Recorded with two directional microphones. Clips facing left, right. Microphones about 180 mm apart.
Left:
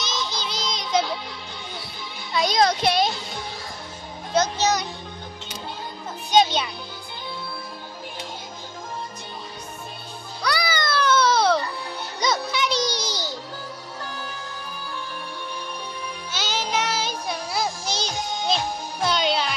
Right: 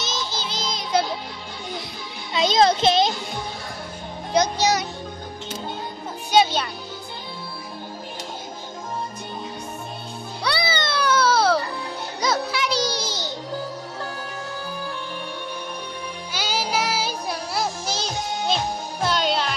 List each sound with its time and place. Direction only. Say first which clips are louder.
0.0 s music: even; centre (ahead or behind)
2.3 s child singing: right 2 dB; 25° right (ahead or behind)
4.3 s music: right 1 dB; 15° right (ahead or behind)
6.3 s music: even; 5° right (ahead or behind)
10.4 s music: even; 25° right (ahead or behind)
11.0 s baby cry: even; 10° right (ahead or behind)
12.2 s music: even; 5° right (ahead or behind)
13.0 s music: even; 25° right (ahead or behind)
16.3 s music: right 2 dB; 10° right (ahead or behind)